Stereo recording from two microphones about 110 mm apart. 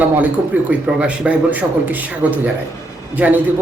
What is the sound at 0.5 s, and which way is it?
Speech, 15° right (ahead or behind).